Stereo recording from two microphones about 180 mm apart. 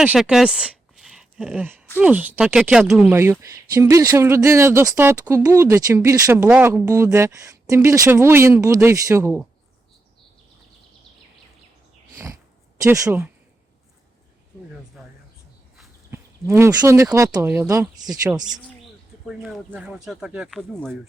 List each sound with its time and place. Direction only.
0.0 s speech: 5° right (ahead or behind)
12.1 s a sound: 15° right (ahead or behind)
12.8 s speech: 15° right (ahead or behind)
15.0 s a sound: 5° right (ahead or behind)
16.0 s speech: 15° right (ahead or behind)
19.3 s speech: 5° right (ahead or behind)